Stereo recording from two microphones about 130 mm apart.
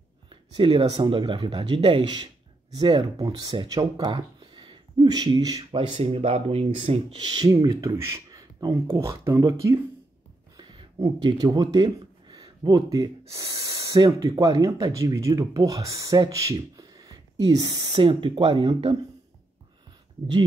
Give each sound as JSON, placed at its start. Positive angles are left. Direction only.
{"t": 0.3, "sound": "speech", "side_deg": -40}
{"t": 5.9, "sound": "speech", "side_deg": -45}
{"t": 11.0, "sound": "speech", "side_deg": -30}
{"t": 17.9, "sound": "speech", "side_deg": -40}